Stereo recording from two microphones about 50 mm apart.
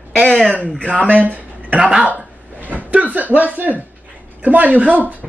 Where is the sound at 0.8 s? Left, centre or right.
Right.